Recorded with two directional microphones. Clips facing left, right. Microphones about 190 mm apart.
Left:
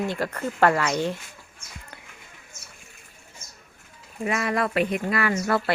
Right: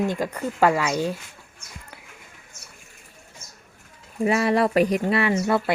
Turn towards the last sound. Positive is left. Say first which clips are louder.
# right 2 dB
turn(degrees=-20)  # may be behind; listen again after turning